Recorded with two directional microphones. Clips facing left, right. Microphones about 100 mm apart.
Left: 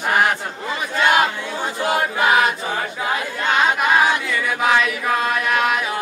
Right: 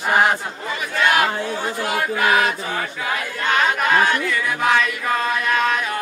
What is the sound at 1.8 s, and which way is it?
Chant, 20° left (ahead or behind).